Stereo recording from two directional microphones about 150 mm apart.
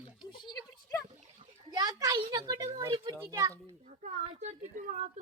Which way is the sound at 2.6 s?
20° right (ahead or behind).